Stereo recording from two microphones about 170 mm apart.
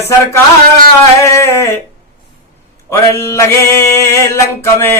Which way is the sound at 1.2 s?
15° left (ahead or behind).